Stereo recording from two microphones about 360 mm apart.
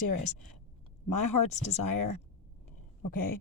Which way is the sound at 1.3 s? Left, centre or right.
Left.